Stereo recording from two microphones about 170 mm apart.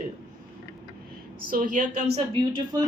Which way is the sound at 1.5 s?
50° right (ahead or behind).